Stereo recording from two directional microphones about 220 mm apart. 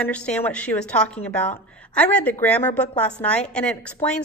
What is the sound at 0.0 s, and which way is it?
A woman's voice, 5° left (ahead or behind).